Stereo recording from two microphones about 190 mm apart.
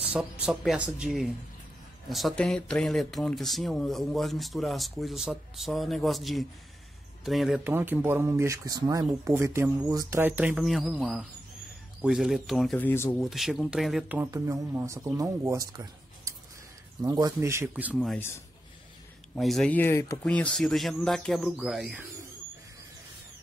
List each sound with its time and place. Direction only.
0.0 s speech: 5° right (ahead or behind); by 13.2 s 10° left (ahead or behind)
13.2 s speech: centre (ahead or behind)
14.1 s speech: 15° right (ahead or behind)
19.3 s speech: centre (ahead or behind)